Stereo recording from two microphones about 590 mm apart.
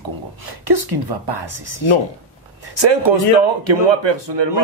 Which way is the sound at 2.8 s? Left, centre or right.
Right.